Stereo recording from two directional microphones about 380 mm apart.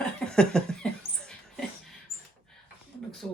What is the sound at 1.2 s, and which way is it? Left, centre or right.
Mouse, centre.